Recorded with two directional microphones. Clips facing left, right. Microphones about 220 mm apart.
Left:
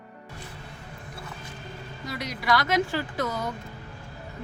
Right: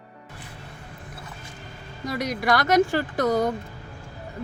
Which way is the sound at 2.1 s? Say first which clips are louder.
Right 3 dB; 50° right (ahead or behind).